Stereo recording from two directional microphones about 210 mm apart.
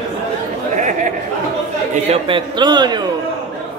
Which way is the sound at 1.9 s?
25° right (ahead or behind).